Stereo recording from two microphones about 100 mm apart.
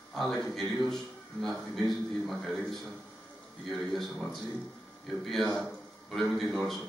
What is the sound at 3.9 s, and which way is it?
A man's voice, centre (ahead or behind).